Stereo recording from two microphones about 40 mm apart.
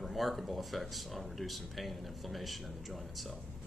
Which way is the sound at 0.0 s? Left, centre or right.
Centre.